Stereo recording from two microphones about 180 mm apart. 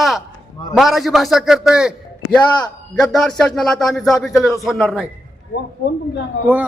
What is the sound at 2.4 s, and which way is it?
Speech, 25° left (ahead or behind).